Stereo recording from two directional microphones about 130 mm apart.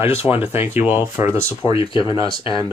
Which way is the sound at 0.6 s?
15° right (ahead or behind).